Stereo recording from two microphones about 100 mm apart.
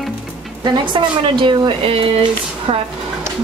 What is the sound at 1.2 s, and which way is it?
Speech, 55° right (ahead or behind).